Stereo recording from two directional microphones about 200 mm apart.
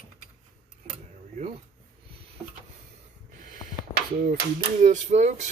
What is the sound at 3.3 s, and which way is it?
Snort, 40° right (ahead or behind).